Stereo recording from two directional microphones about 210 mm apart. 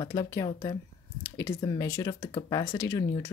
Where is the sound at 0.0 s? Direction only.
20° left (ahead or behind).